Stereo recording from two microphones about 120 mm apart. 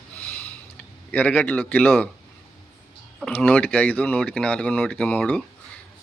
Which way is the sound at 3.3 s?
10° left (ahead or behind).